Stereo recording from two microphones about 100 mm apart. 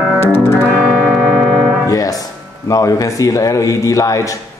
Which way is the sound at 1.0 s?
5° right (ahead or behind).